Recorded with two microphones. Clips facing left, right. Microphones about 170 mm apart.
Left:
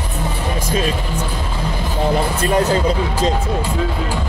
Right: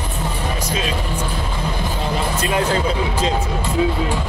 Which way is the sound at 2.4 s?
45° left (ahead or behind).